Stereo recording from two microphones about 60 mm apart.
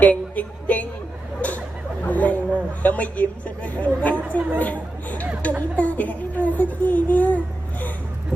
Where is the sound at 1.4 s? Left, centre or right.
Left.